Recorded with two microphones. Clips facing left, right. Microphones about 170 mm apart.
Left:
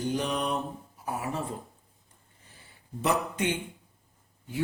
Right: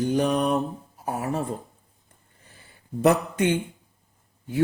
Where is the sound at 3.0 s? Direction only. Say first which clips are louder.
Right 7 dB; 50° right (ahead or behind).